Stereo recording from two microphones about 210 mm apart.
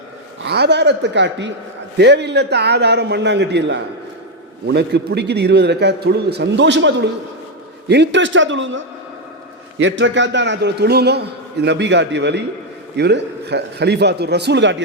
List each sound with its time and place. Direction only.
0.4 s a man's voice: 50° right (ahead or behind)